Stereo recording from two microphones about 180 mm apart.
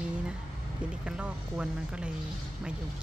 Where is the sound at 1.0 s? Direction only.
5° right (ahead or behind).